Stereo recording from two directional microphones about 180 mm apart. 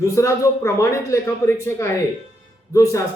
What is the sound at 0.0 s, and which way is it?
A man's voice, 15° left (ahead or behind).